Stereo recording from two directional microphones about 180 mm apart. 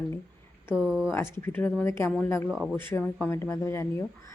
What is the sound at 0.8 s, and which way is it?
Speech, 5° right (ahead or behind).